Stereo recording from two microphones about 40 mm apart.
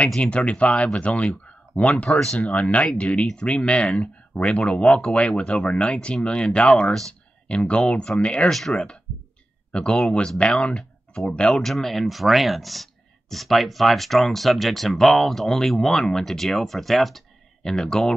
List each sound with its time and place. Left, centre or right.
0.2 s speech: left
2.0 s speech: centre
2.5 s speech: left
8.5 s speech: centre
8.7 s speech: centre
17.6 s speech: centre